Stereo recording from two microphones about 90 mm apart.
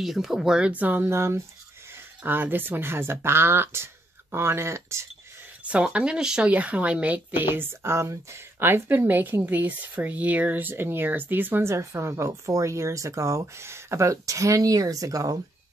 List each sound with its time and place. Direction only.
0.0 s speech: 5° right (ahead or behind); by 5.0 s 30° right (ahead or behind)
5.6 s speech: 15° right (ahead or behind); by 15.3 s 40° right (ahead or behind)